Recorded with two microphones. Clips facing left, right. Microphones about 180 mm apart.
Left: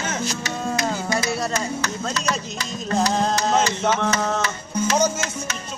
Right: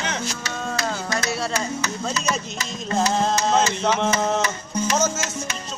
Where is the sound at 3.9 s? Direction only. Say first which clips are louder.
Right 1 dB; 15° right (ahead or behind).